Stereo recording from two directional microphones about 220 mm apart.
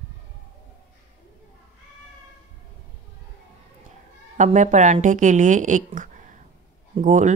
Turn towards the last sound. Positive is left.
turn(degrees=-35)  # may be behind; listen again after turning